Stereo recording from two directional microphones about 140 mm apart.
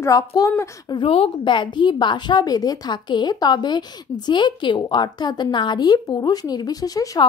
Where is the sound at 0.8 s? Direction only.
35° left (ahead or behind).